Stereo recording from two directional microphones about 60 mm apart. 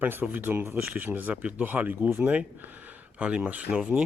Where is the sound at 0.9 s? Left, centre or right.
Right.